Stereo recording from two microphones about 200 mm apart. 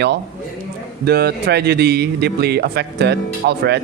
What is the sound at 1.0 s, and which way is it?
A man's voice, 55° right (ahead or behind).